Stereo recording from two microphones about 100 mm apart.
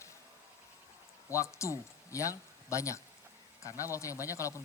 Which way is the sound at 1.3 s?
30° left (ahead or behind).